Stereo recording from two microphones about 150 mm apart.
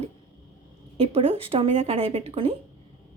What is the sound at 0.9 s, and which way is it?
A woman's voice, 40° right (ahead or behind).